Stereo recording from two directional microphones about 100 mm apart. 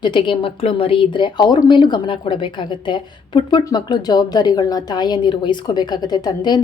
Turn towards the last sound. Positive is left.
turn(degrees=45)  # may be behind; listen again after turning